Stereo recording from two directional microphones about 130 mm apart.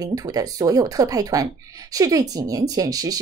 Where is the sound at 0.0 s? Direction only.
30° right (ahead or behind).